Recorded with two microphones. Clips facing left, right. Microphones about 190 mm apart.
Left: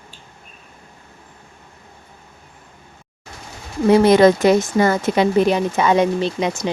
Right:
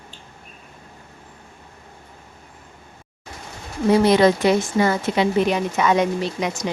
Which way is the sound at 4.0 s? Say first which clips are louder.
Left 4 dB; 50° left (ahead or behind).